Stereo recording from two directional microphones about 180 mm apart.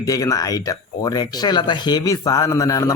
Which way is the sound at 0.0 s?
20° left (ahead or behind).